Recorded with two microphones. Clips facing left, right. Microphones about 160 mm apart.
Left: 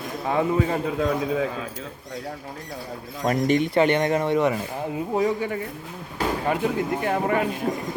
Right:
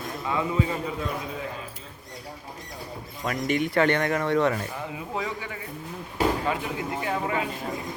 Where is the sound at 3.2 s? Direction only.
35° left (ahead or behind); by 4.6 s 15° left (ahead or behind).